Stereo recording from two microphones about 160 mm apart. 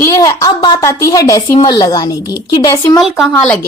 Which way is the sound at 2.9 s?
Centre (ahead or behind).